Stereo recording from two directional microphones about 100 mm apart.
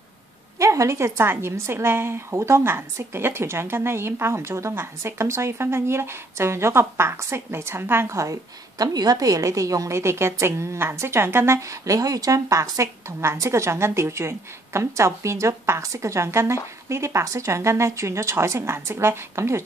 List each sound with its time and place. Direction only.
0.6 s a woman's voice: 30° right (ahead or behind)